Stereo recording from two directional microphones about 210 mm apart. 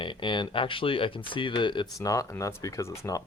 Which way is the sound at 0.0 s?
25° left (ahead or behind).